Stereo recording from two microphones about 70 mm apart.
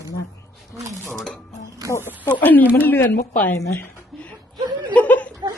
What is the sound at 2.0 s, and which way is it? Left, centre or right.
Speech, right.